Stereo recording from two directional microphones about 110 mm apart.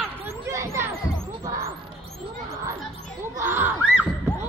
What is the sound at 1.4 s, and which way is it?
Heart sounds, 30° right (ahead or behind).